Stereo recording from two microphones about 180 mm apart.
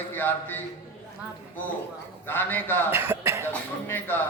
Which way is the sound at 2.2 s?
10° left (ahead or behind).